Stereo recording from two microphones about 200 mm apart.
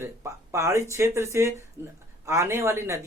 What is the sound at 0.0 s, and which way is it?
Speech, 15° right (ahead or behind).